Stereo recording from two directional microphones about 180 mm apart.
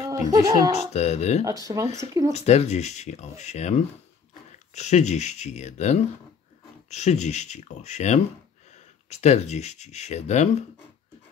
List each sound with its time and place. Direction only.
0.1 s speech: 20° right (ahead or behind)
0.7 s speech: 40° left (ahead or behind)
1.4 s speech: 20° right (ahead or behind)
2.3 s speech: 35° left (ahead or behind)